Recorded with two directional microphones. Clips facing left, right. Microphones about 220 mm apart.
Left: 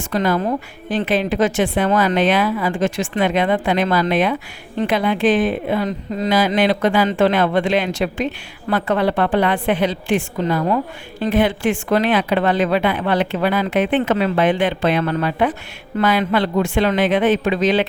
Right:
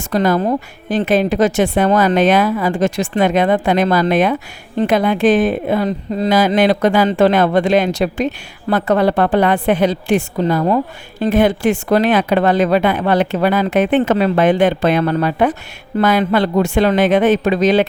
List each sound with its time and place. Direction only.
0.1 s a woman's voice: 40° right (ahead or behind)